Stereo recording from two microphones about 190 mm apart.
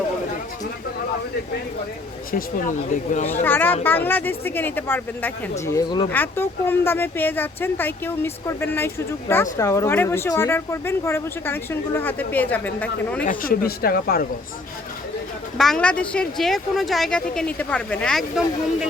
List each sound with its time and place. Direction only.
2.3 s speech: 45° left (ahead or behind)
3.4 s speech: 10° left (ahead or behind)
5.6 s speech: 20° left (ahead or behind)
13.2 s speech: 45° left (ahead or behind)
15.5 s speech: centre (ahead or behind)